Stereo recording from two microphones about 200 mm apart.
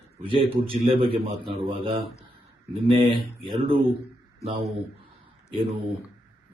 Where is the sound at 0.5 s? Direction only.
25° right (ahead or behind).